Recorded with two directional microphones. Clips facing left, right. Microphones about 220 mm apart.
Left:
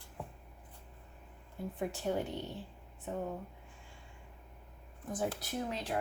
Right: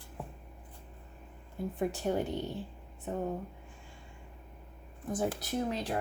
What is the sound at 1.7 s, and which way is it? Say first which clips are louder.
Speech: right 3 dB; 45° right (ahead or behind).